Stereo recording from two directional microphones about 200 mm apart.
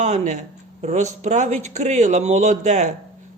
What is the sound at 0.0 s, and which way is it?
A man's voice, 35° right (ahead or behind).